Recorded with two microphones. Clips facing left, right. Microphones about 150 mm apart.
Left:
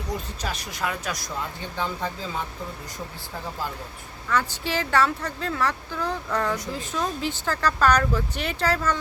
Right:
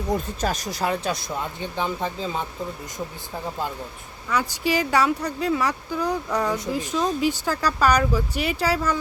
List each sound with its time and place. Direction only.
0.1 s speech: 45° right (ahead or behind)
1.7 s speech: 20° right (ahead or behind)
4.3 s speech: 10° right (ahead or behind)